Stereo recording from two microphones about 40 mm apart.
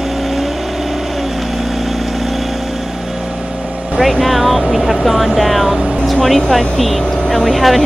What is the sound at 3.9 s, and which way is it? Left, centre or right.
Speech, centre.